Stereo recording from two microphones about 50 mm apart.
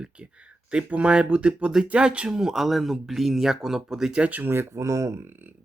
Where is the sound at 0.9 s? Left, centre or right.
Right.